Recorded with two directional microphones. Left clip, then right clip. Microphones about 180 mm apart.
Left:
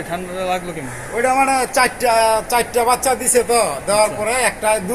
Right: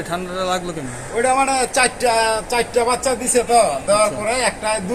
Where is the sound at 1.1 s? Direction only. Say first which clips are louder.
Left 1 dB; 10° left (ahead or behind).